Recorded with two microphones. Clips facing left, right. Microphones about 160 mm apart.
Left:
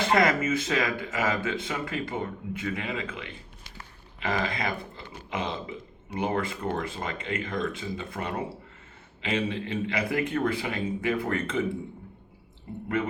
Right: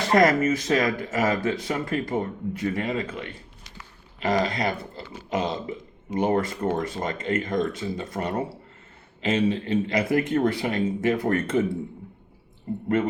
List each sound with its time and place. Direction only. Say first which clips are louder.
0.1 s speech: right 6 dB; 40° right (ahead or behind)